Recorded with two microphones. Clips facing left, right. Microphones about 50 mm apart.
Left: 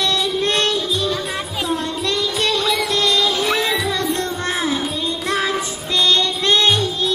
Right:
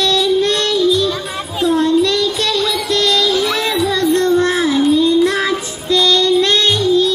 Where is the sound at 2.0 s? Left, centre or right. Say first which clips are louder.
Right 4 dB; left.